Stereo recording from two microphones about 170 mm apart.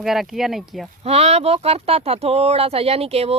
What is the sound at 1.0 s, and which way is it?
Speech, 35° right (ahead or behind).